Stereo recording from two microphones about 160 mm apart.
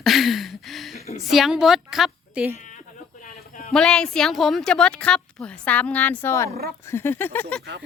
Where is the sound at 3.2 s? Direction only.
55° left (ahead or behind).